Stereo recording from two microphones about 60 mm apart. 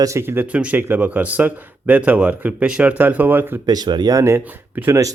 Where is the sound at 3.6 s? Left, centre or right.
Right.